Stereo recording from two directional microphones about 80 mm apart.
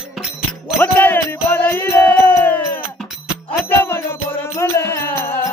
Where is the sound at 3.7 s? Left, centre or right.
Left.